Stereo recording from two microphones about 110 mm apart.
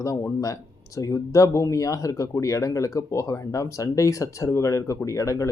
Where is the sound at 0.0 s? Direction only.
25° left (ahead or behind).